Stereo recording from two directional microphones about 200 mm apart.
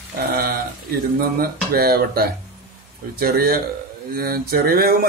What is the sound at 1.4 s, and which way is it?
Speech, 50° right (ahead or behind).